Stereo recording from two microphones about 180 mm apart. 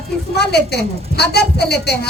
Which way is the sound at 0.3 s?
65° left (ahead or behind).